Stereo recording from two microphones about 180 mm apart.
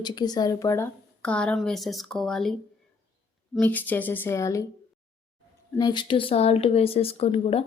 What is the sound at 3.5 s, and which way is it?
Speech, 10° left (ahead or behind).